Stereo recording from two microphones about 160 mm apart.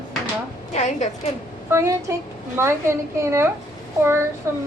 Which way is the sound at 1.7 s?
20° right (ahead or behind).